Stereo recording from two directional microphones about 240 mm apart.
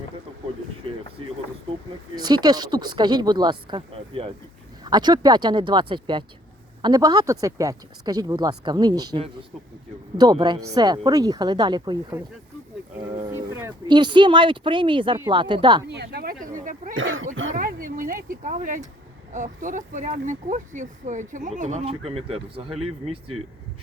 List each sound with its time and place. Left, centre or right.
2.1 s speech: centre
13.3 s speech: centre
15.9 s speech: right
16.9 s speech: right
17.5 s speech: right